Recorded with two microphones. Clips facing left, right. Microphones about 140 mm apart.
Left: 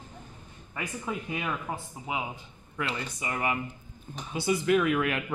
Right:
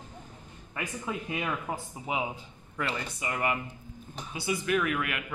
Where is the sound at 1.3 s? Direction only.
Centre (ahead or behind).